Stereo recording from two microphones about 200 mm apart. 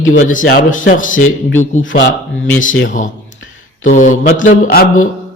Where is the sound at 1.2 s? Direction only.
90° left.